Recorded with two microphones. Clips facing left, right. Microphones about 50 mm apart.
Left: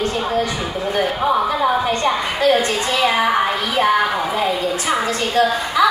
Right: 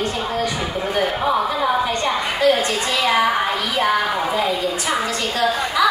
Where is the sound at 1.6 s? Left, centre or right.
Centre.